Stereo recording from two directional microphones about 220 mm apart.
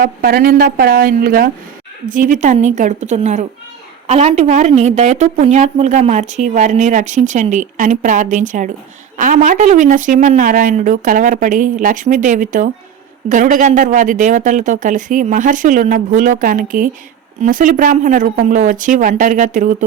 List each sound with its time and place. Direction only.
0.0 s a woman's voice: 45° right (ahead or behind)